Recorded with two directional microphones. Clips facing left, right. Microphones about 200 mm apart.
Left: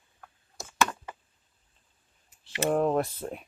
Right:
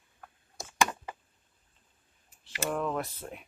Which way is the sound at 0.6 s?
15° right (ahead or behind).